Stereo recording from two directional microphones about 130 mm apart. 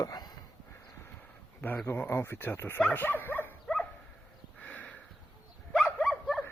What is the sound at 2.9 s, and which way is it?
Dog, 15° left (ahead or behind).